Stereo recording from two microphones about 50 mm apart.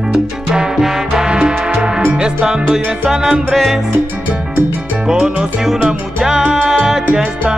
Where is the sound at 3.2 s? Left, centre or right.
Centre.